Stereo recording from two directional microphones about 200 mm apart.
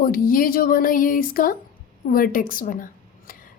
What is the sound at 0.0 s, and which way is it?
A woman's voice, 45° left (ahead or behind).